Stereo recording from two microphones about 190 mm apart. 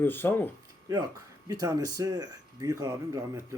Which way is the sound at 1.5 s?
20° right (ahead or behind).